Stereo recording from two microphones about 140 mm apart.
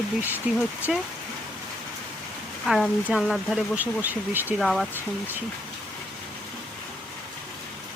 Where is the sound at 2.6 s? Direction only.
Centre (ahead or behind).